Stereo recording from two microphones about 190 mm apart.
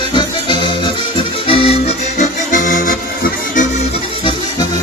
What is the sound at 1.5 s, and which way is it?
Accordion, 30° left (ahead or behind).